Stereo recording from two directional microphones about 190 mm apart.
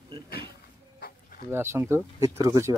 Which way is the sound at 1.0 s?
45° left (ahead or behind).